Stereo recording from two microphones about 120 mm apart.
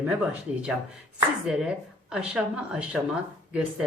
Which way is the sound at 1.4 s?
5° right (ahead or behind).